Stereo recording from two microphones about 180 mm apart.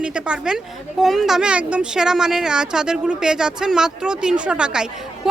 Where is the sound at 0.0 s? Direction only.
5° right (ahead or behind).